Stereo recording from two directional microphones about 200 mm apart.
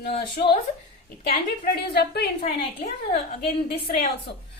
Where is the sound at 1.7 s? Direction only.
55° left (ahead or behind).